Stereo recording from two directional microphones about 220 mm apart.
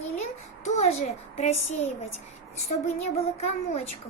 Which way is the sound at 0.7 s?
30° left (ahead or behind).